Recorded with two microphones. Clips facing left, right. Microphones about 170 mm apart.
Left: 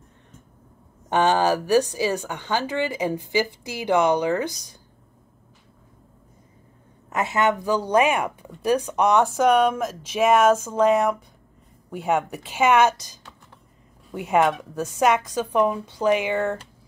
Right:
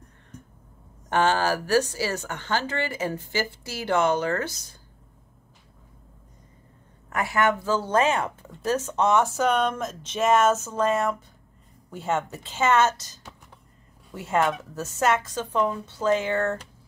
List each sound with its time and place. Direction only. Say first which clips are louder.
1.1 s a woman's voice: left 3 dB; 15° left (ahead or behind)
7.1 s a woman's voice: left 2 dB; 20° left (ahead or behind)